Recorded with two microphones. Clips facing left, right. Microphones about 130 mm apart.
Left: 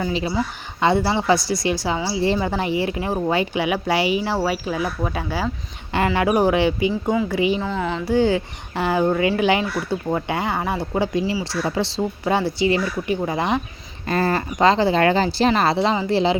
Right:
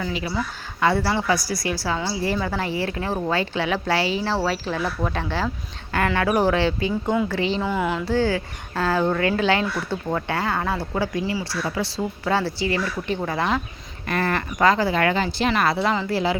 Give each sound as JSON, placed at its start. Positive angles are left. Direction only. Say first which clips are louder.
{"t": 0.0, "sound": "speech", "louder": "left 4 dB", "side_deg": 25}
{"t": 7.6, "sound": "carnatic music", "louder": "right 1 dB", "side_deg": -5}
{"t": 8.0, "sound": "speech", "louder": "left 3 dB", "side_deg": 15}
{"t": 14.1, "sound": "speech", "louder": "left 3 dB", "side_deg": 30}